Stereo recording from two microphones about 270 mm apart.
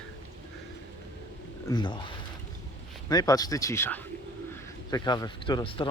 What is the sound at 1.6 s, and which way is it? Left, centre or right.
Speech, centre.